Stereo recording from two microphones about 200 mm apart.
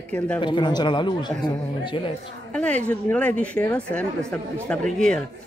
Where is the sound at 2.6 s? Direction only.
5° left (ahead or behind).